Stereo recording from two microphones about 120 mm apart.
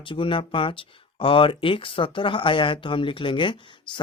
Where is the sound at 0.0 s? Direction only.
45° left (ahead or behind).